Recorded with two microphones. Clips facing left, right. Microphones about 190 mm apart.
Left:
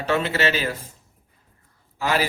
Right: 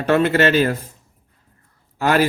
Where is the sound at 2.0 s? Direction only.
55° right (ahead or behind).